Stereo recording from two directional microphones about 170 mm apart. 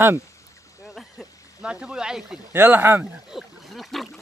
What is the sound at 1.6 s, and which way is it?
Speech, 5° right (ahead or behind).